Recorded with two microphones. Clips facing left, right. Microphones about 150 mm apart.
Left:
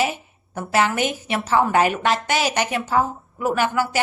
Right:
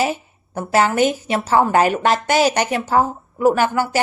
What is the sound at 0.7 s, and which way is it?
A woman's voice, 40° right (ahead or behind).